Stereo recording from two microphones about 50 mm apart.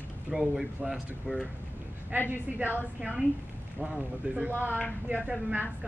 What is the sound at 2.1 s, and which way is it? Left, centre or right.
Speech, right.